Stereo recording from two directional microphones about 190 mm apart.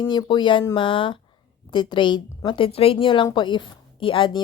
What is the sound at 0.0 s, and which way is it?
Speech, 25° left (ahead or behind).